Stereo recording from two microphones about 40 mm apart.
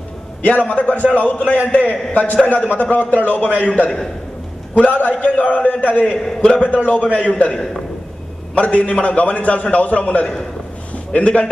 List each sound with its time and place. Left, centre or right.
0.4 s a man's voice: left
7.5 s a man's voice: centre
8.5 s a man's voice: left